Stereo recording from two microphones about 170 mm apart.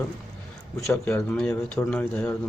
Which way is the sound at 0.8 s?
15° left (ahead or behind).